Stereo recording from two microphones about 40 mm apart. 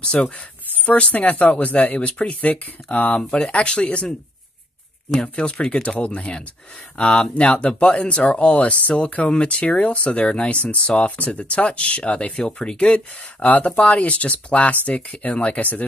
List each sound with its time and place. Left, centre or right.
0.0 s speech: left
0.7 s speech: left
3.3 s speech: left
5.4 s speech: left